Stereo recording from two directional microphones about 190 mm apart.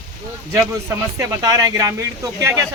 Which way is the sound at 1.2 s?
20° right (ahead or behind).